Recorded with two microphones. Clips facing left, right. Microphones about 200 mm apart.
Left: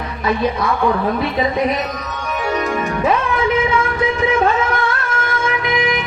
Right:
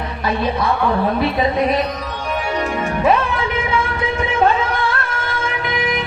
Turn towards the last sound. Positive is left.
turn(degrees=-30)  # may be behind; listen again after turning